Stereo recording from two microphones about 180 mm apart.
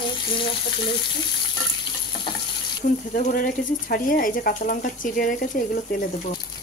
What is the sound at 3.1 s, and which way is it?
Speech, 50° left (ahead or behind).